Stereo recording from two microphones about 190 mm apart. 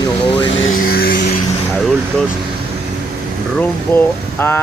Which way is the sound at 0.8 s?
50° left (ahead or behind).